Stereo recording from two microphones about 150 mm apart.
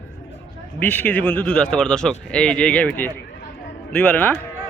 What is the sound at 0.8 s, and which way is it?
Speech, 10° left (ahead or behind).